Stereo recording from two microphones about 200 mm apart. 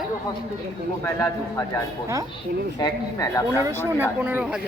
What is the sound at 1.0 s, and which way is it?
Speech, 15° left (ahead or behind).